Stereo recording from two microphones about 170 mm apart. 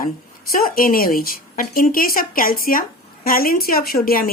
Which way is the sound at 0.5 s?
60° left (ahead or behind).